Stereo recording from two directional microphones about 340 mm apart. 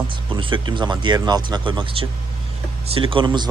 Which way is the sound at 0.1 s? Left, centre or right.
Centre.